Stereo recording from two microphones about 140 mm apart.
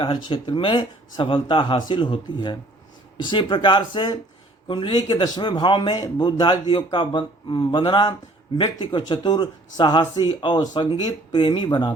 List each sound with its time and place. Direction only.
0.0 s a man's voice: 35° left (ahead or behind)